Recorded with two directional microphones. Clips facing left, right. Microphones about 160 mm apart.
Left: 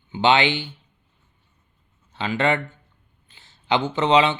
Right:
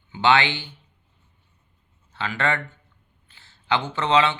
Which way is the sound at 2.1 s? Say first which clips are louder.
Left 4 dB; 20° left (ahead or behind).